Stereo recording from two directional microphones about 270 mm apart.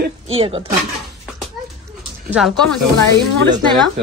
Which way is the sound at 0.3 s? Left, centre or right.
Right.